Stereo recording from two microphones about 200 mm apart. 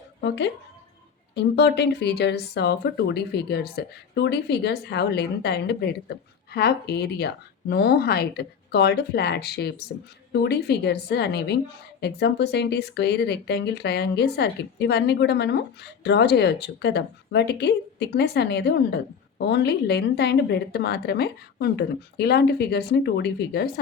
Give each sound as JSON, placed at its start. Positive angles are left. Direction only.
{"t": 0.2, "sound": "a woman's voice", "side_deg": 60}